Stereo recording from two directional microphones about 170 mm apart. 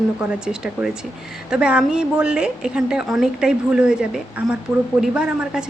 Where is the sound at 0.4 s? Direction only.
5° right (ahead or behind).